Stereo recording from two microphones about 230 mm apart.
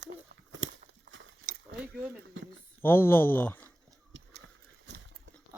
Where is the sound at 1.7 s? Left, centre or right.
Right.